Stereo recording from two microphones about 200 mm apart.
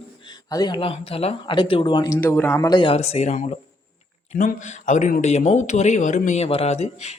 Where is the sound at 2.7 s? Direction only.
25° left (ahead or behind).